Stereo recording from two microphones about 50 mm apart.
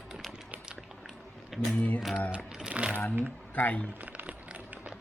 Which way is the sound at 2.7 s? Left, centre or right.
Right.